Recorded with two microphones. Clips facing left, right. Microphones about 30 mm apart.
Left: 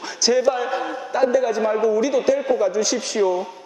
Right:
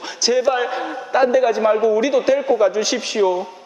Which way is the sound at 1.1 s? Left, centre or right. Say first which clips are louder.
Right 3 dB; right.